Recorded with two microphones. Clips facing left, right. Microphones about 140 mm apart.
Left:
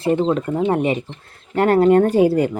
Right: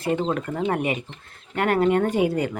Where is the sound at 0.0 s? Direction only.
25° left (ahead or behind).